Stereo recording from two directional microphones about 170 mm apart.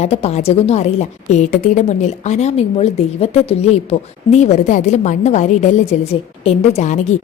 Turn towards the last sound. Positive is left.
turn(degrees=45)  # may be behind; listen again after turning